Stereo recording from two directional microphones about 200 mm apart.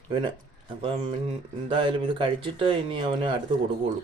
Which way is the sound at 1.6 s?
25° right (ahead or behind).